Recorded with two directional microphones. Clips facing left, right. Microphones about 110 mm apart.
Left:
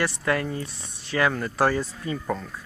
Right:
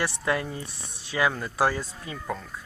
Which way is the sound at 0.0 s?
15° right (ahead or behind).